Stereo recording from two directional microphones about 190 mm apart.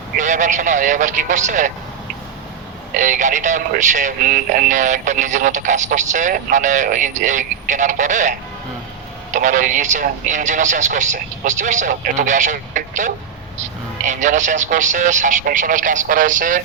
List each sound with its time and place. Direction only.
0.2 s speech: 40° right (ahead or behind)
2.9 s speech: 40° right (ahead or behind)